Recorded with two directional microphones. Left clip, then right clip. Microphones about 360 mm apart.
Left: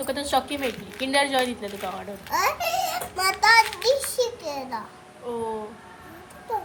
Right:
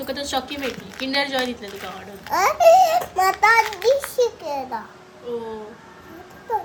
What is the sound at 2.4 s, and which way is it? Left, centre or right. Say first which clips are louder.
Speech: right 11 dB; centre.